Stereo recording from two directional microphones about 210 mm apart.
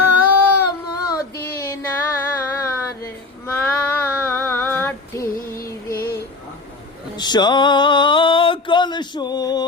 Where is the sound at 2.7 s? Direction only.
10° left (ahead or behind).